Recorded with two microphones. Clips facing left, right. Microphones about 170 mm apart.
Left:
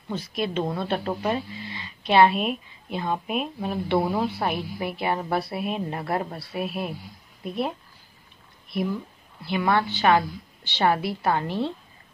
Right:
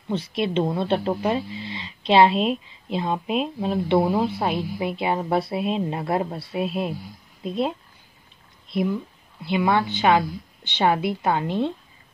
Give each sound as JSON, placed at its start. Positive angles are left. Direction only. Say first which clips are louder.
{"t": 0.1, "sound": "speech", "louder": "right 4 dB", "side_deg": -25}